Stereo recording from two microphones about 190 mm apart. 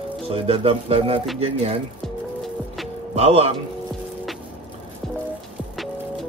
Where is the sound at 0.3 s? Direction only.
30° right (ahead or behind).